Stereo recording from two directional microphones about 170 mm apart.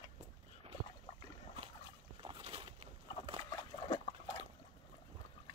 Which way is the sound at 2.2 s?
30° right (ahead or behind).